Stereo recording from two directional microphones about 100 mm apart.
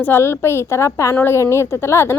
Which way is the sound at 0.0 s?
25° left (ahead or behind).